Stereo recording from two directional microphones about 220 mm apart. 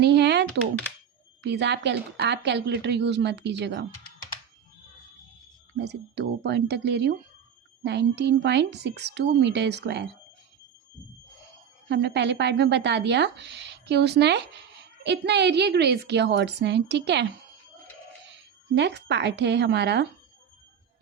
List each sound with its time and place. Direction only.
0.0 s typing: 50° right (ahead or behind)
1.4 s speech: 50° right (ahead or behind)
5.7 s speech: 50° right (ahead or behind)
11.9 s speech: 50° right (ahead or behind)
18.3 s speech: 50° right (ahead or behind)